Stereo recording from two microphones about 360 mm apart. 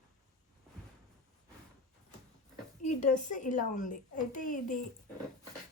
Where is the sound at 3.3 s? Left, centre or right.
Left.